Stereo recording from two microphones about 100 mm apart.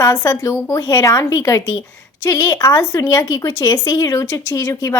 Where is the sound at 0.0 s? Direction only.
30° left (ahead or behind).